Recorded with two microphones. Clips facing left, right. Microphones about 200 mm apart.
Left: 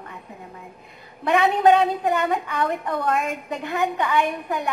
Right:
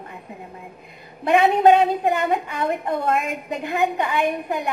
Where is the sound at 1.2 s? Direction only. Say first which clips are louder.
Right 2 dB; 25° right (ahead or behind).